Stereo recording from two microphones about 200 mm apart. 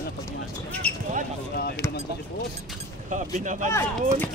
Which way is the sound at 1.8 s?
15° left (ahead or behind).